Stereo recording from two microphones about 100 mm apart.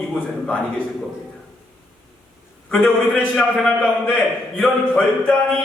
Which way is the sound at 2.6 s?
10° left (ahead or behind).